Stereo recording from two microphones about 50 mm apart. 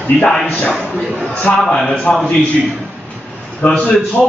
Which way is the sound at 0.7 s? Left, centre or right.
Centre.